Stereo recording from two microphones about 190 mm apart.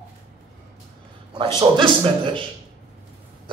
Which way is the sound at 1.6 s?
25° right (ahead or behind).